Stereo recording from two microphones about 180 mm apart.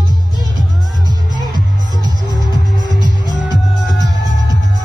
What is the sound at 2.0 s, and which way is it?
Music, 20° right (ahead or behind).